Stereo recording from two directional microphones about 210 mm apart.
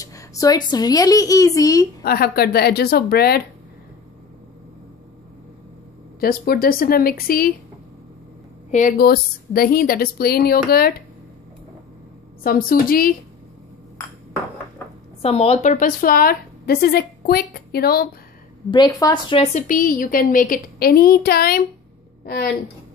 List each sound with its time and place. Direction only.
0.0 s a woman's voice: 15° left (ahead or behind)
2.0 s a woman's voice: 45° left (ahead or behind)
6.1 s a woman's voice: 45° left (ahead or behind)
8.7 s a woman's voice: 40° left (ahead or behind)
12.4 s a woman's voice: 45° left (ahead or behind)
15.2 s a woman's voice: 30° left (ahead or behind); by 18.0 s 45° left (ahead or behind)
18.7 s speech: 20° left (ahead or behind)
19.7 s a woman's voice: 40° left (ahead or behind)